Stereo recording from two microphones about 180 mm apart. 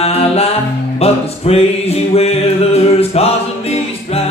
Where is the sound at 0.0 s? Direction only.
35° left (ahead or behind).